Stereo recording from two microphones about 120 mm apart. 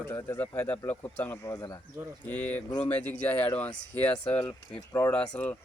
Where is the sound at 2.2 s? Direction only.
15° left (ahead or behind).